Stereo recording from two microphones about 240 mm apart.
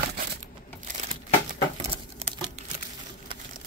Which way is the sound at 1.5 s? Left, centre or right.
Right.